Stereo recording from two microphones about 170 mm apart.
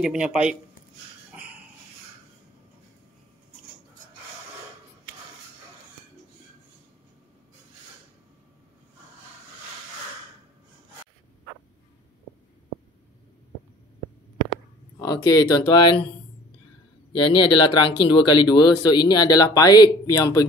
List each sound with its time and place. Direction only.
0.0 s speech: 5° right (ahead or behind)
1.3 s dog: 10° right (ahead or behind)
15.0 s speech: 20° left (ahead or behind)
17.1 s speech: 30° left (ahead or behind)